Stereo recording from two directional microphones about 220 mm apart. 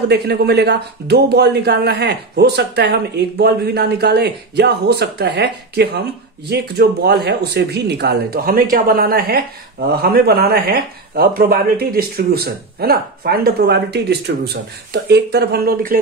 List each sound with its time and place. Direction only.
0.1 s speech: 50° right (ahead or behind)